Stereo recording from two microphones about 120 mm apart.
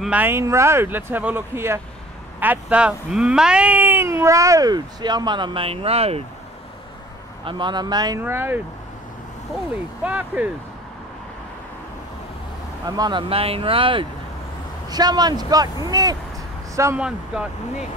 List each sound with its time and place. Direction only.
0.0 s speech: 15° right (ahead or behind); by 6.2 s 55° right (ahead or behind)
7.4 s a man's voice: 40° right (ahead or behind)
8.2 s speech: 20° right (ahead or behind)
10.0 s speech: 10° right (ahead or behind)
12.8 s a man's voice: 35° right (ahead or behind)
13.3 s speech: 50° right (ahead or behind)
14.9 s a man's voice: 35° right (ahead or behind)
16.9 s speech: 10° right (ahead or behind)